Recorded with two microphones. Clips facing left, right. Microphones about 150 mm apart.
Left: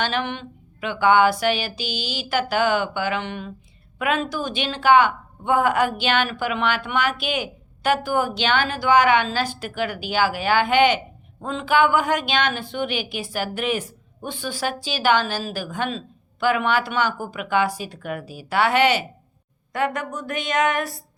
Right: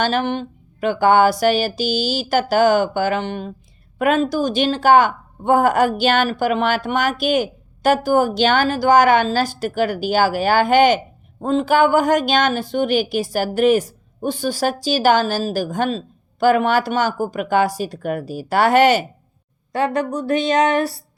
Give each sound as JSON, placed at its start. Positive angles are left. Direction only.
{"t": 0.0, "sound": "speech", "side_deg": -40}
{"t": 19.7, "sound": "speech", "side_deg": -30}